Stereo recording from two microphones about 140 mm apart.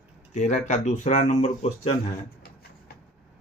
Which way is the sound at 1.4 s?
45° left (ahead or behind).